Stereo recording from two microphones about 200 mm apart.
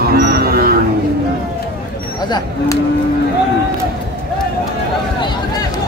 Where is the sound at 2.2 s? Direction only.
20° left (ahead or behind).